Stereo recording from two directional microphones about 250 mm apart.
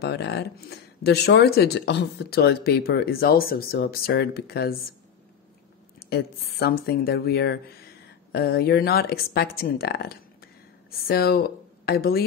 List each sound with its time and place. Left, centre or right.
0.0 s speech: left
5.9 s speech: left